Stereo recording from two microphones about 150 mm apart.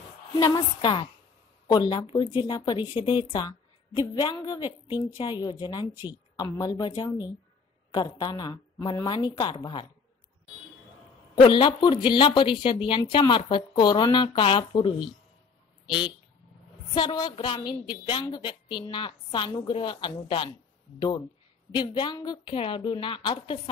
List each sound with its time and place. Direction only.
0.4 s a woman's voice: 25° left (ahead or behind)
3.3 s a sound: 30° left (ahead or behind)
4.1 s a woman's voice: 30° left (ahead or behind)
7.9 s a woman's voice: 30° left (ahead or behind)
11.4 s a woman's voice: 30° left (ahead or behind)
16.9 s a woman's voice: 30° left (ahead or behind)
21.7 s a woman's voice: 30° left (ahead or behind)